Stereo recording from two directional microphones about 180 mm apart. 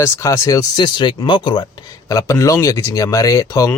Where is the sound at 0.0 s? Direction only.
15° left (ahead or behind).